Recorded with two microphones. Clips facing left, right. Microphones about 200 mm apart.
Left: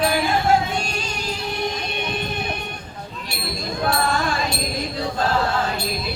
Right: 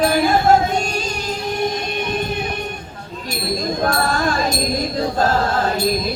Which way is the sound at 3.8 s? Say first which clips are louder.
Right 1 dB; 40° right (ahead or behind).